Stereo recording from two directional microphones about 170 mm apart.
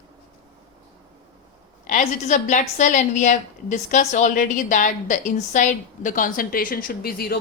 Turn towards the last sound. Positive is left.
turn(degrees=65)  # may be behind; listen again after turning